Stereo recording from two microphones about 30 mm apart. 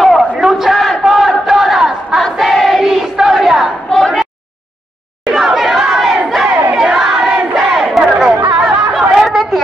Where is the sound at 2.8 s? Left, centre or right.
Centre.